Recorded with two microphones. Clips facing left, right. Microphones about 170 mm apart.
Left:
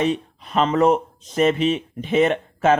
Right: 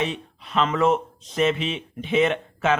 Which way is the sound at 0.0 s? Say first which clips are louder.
Left 6 dB; 40° left (ahead or behind).